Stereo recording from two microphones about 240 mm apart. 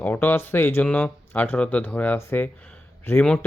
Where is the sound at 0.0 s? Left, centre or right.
Centre.